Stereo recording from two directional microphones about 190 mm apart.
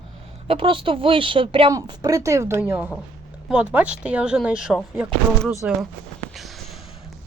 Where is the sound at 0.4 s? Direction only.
30° right (ahead or behind).